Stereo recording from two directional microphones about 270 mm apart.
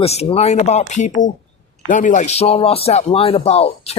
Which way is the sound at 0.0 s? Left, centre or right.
Left.